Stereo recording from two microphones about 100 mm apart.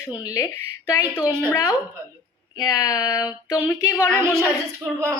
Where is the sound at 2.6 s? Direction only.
35° left (ahead or behind).